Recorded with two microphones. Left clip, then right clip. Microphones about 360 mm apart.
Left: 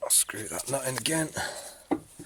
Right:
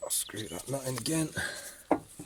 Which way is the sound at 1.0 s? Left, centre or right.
Left.